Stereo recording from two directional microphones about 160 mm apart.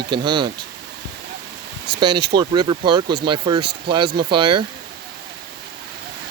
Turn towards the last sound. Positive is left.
turn(degrees=-30)  # may be behind; listen again after turning